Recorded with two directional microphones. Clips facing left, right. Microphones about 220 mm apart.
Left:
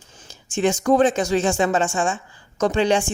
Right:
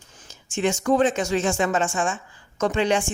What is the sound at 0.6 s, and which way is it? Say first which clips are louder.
Speech: left 3 dB; 35° left (ahead or behind).